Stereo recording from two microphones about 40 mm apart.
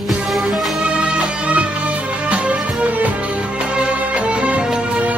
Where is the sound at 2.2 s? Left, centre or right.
Right.